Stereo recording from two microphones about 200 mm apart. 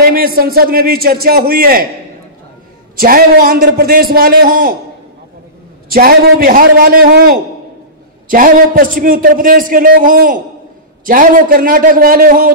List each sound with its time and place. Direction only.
0.0 s a man's voice: 45° right (ahead or behind)
3.0 s a man's voice: 50° right (ahead or behind)
5.9 s a man's voice: 50° right (ahead or behind)